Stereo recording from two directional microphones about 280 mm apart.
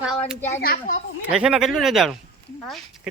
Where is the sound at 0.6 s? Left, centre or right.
Left.